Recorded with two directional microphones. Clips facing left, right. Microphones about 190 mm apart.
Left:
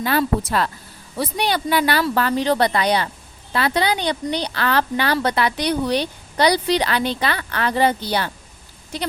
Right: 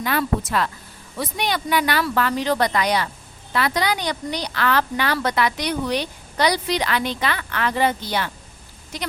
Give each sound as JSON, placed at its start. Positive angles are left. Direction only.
{"t": 0.0, "sound": "a woman's voice", "side_deg": 30}